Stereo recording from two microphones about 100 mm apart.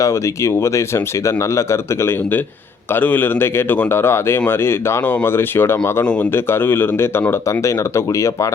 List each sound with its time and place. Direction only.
0.0 s a man's voice: 30° left (ahead or behind)